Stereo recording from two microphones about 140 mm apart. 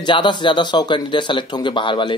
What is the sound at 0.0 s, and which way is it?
Speech, 35° left (ahead or behind).